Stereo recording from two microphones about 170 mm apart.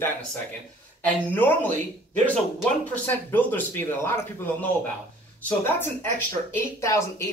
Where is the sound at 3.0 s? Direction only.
10° left (ahead or behind).